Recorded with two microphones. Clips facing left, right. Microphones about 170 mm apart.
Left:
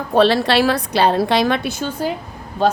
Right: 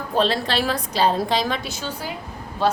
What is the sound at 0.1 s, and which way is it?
A woman's voice, 70° left (ahead or behind).